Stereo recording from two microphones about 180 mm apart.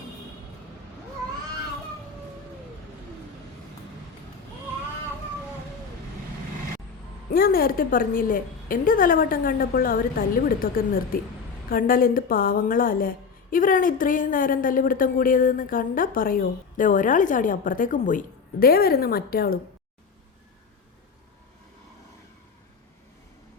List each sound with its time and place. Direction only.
7.3 s a woman's voice: 55° left (ahead or behind)